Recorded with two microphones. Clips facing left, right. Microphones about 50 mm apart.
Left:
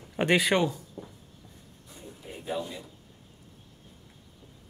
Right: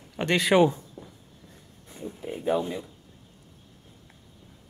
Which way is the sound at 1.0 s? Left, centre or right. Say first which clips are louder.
Left 2 dB; centre.